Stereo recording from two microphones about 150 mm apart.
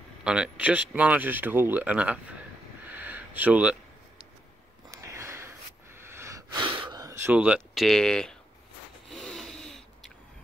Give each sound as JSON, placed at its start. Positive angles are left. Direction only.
{"t": 0.2, "sound": "speech", "side_deg": -5}
{"t": 2.8, "sound": "a sound", "side_deg": -10}
{"t": 4.8, "sound": "snort", "side_deg": -20}
{"t": 7.3, "sound": "speech", "side_deg": -5}
{"t": 9.1, "sound": "rub", "side_deg": 0}